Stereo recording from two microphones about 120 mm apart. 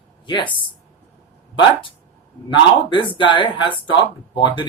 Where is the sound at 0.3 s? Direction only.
40° left (ahead or behind).